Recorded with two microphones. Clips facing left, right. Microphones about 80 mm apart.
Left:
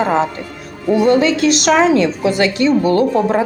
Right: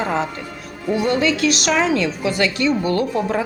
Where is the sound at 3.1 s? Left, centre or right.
Left.